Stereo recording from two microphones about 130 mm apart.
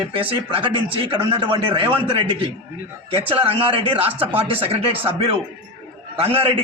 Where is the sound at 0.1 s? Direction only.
45° right (ahead or behind).